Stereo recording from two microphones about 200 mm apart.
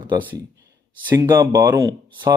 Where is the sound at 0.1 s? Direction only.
10° right (ahead or behind).